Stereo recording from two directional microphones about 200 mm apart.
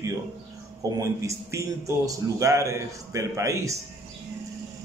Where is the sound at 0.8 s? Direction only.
15° right (ahead or behind).